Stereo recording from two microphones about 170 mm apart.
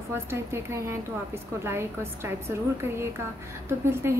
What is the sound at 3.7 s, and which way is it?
Speech, 15° right (ahead or behind).